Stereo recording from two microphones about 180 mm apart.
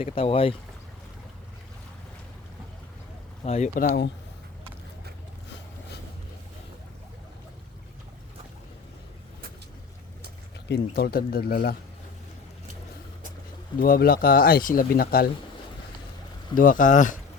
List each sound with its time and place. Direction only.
0.0 s speech: 30° left (ahead or behind)
3.4 s speech: 35° left (ahead or behind)
3.8 s speech: 60° left (ahead or behind)
10.7 s speech: 65° left (ahead or behind)
13.7 s speech: 55° left (ahead or behind)
16.6 s speech: 50° left (ahead or behind)